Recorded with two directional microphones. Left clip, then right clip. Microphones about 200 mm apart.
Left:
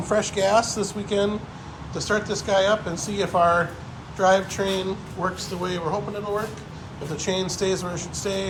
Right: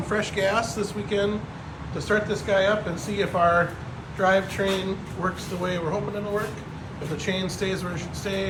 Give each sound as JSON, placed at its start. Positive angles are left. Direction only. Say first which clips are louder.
{"t": 0.1, "sound": "speech", "louder": "left 4 dB", "side_deg": 15}
{"t": 7.2, "sound": "speech", "louder": "left 3 dB", "side_deg": 15}